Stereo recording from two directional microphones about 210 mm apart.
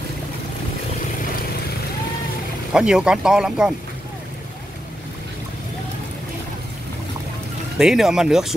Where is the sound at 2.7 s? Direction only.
5° right (ahead or behind).